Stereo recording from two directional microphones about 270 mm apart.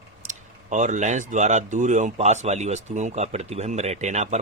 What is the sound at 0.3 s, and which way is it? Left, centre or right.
Speech, right.